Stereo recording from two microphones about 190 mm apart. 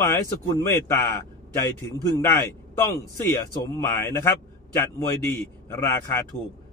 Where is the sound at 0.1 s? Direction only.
15° left (ahead or behind).